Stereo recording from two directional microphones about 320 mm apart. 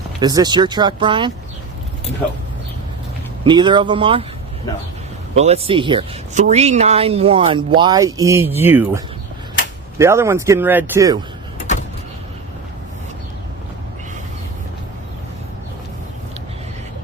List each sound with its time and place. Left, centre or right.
0.2 s speech: centre
3.4 s speech: centre
5.3 s speech: centre
10.0 s speech: centre